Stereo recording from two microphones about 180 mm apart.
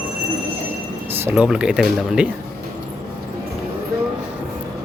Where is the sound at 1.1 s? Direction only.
10° right (ahead or behind).